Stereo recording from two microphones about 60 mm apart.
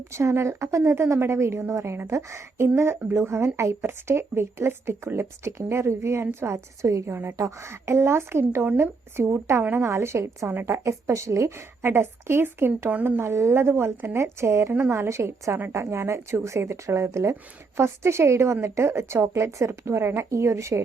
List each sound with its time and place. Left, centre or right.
0.1 s a woman's voice: right
11.8 s a woman's voice: right